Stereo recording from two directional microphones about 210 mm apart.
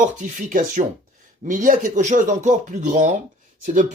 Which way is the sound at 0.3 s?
40° right (ahead or behind).